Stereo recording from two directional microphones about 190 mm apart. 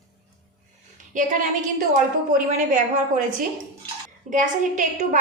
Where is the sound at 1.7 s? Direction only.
45° right (ahead or behind).